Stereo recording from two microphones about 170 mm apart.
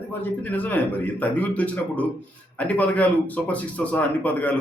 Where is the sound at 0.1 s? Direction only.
10° left (ahead or behind).